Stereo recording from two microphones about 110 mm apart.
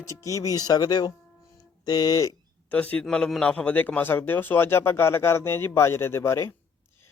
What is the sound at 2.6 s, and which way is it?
A man's voice, 15° left (ahead or behind).